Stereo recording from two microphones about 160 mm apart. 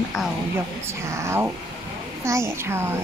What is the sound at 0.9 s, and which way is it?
Speech, 15° right (ahead or behind).